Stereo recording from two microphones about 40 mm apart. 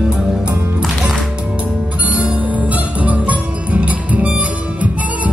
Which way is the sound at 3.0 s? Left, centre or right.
Right.